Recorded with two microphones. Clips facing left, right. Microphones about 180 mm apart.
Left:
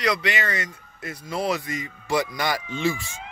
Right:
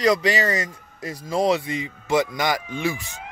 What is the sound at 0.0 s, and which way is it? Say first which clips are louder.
A man's voice: right 5 dB; 40° right (ahead or behind).